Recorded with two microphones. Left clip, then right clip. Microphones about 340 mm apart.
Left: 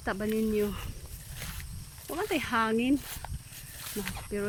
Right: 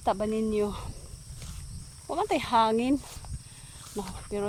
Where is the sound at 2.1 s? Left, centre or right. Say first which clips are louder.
Right 5 dB; centre.